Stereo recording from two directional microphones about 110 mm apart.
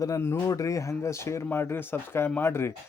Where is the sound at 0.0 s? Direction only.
25° left (ahead or behind).